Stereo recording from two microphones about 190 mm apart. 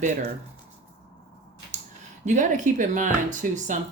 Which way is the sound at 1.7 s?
40° right (ahead or behind).